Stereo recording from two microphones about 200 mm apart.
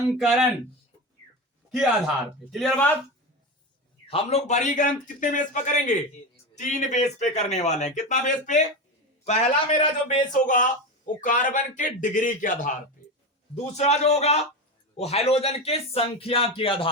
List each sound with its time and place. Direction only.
0.2 s speech: centre (ahead or behind)
2.5 s speech: centre (ahead or behind)
4.1 s a man's voice: 30° left (ahead or behind)
13.7 s a man's voice: 35° left (ahead or behind)